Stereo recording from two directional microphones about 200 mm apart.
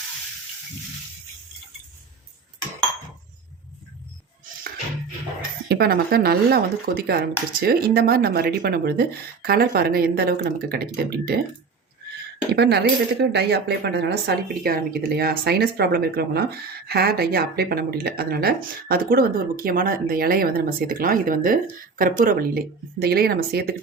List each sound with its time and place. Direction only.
5.6 s speech: 50° right (ahead or behind)
12.5 s speech: 55° right (ahead or behind)